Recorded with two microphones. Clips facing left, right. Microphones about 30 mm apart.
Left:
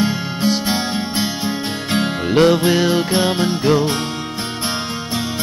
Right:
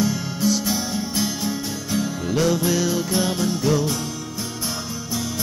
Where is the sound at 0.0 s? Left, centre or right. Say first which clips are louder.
Left 3 dB; left.